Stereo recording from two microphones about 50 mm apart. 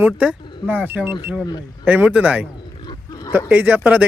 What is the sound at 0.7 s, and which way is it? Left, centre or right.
Speech, right.